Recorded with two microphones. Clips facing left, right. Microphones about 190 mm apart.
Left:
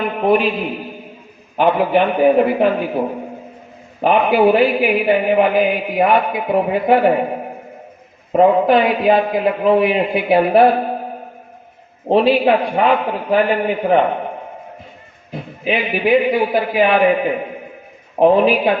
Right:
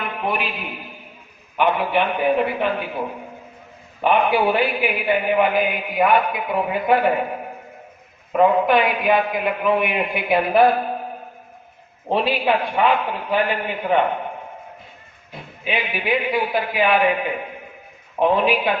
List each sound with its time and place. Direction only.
0.2 s a man's voice: 35° left (ahead or behind)
1.5 s a man's voice: 40° left (ahead or behind)
4.0 s a man's voice: 40° left (ahead or behind)
12.0 s a man's voice: 35° left (ahead or behind)
15.6 s a man's voice: 35° left (ahead or behind)